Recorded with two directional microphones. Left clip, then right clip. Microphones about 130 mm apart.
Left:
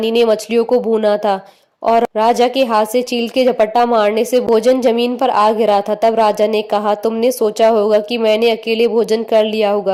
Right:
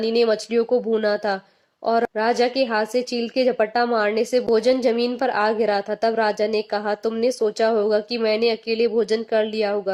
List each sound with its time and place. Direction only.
0.0 s speech: 45° left (ahead or behind)